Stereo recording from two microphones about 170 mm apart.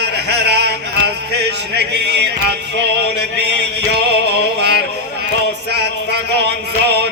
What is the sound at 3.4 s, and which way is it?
Music, 80° right.